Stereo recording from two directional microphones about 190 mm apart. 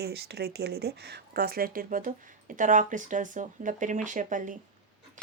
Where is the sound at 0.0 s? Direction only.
55° right (ahead or behind).